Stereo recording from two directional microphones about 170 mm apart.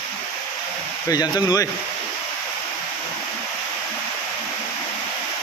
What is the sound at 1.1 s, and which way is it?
Speech, 25° left (ahead or behind).